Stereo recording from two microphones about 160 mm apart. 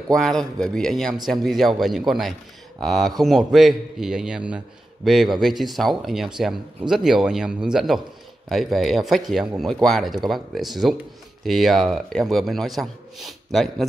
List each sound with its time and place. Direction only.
0.1 s a man's voice: 5° left (ahead or behind)